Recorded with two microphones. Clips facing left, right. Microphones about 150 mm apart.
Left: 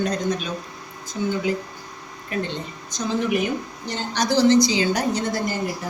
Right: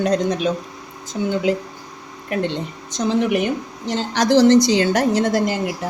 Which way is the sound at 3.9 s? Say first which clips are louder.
Right 6 dB; 90° right.